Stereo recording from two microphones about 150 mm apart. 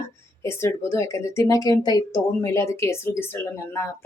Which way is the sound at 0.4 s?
15° left (ahead or behind).